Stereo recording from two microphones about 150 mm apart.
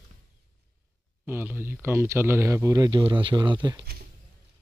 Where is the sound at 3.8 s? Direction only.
90° right.